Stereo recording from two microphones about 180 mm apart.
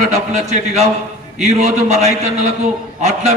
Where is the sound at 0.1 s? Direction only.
40° right (ahead or behind).